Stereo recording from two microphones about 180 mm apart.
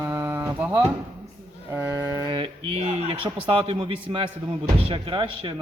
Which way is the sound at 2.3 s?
30° right (ahead or behind).